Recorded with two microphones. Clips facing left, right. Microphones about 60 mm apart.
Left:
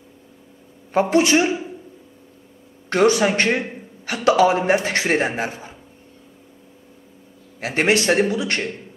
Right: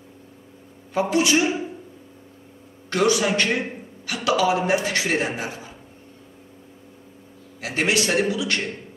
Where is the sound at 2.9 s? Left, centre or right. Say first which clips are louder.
Left 4 dB; left.